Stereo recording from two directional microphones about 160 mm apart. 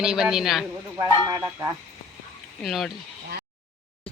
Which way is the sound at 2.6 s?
Centre (ahead or behind).